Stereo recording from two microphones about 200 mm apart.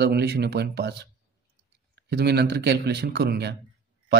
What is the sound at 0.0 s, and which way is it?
Speech, 55° right (ahead or behind).